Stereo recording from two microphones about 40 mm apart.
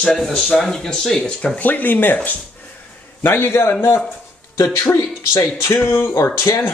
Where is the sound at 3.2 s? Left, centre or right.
Left.